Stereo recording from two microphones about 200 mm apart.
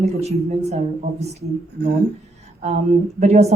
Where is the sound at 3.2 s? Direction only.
35° right (ahead or behind).